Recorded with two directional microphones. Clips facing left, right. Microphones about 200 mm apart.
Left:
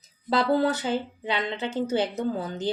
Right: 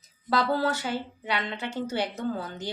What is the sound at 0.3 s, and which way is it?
Speech, 20° left (ahead or behind).